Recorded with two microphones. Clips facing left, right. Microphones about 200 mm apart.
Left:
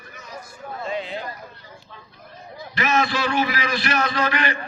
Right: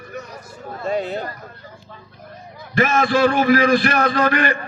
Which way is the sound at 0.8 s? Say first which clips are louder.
Right 6 dB; 45° right (ahead or behind).